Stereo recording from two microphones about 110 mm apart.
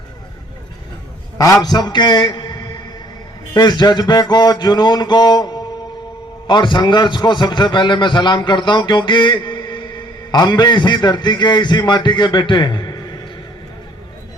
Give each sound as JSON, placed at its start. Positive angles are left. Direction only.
{"t": 1.6, "sound": "a man's voice", "side_deg": 40}
{"t": 3.5, "sound": "a sound", "side_deg": 40}
{"t": 6.5, "sound": "a man's voice", "side_deg": 45}